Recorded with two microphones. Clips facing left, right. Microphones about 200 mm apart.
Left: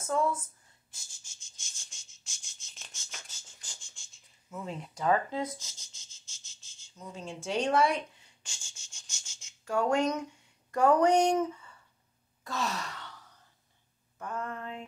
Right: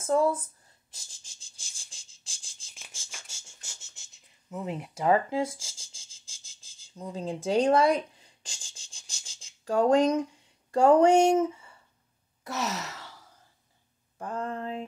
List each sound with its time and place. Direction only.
0.0 s speech: 35° right (ahead or behind)
0.9 s cricket: 35° right (ahead or behind)
2.9 s a sound: 30° right (ahead or behind)
4.6 s speech: 10° right (ahead or behind)
4.9 s speech: 25° right (ahead or behind)
6.1 s insect: 30° right (ahead or behind)
6.5 s a sound: 30° right (ahead or behind)
10.7 s speech: 30° right (ahead or behind)
12.4 s sigh: 20° right (ahead or behind)
14.1 s speech: 30° right (ahead or behind)